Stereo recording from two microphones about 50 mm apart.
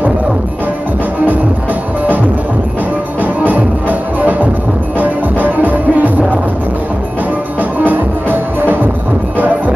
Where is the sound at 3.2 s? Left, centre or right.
Right.